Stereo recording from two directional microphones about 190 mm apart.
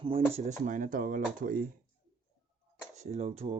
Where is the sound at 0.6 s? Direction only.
45° right (ahead or behind).